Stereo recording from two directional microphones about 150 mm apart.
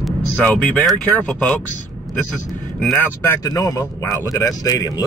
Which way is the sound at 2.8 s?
5° left (ahead or behind).